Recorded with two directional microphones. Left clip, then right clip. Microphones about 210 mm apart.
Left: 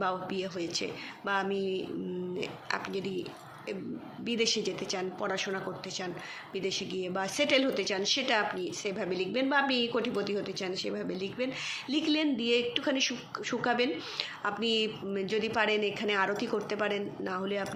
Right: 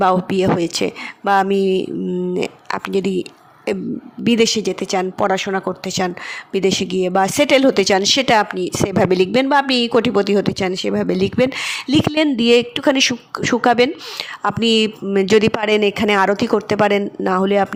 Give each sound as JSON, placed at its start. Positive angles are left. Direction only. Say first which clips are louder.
{"t": 0.0, "sound": "speech", "louder": "right 17 dB", "side_deg": -55}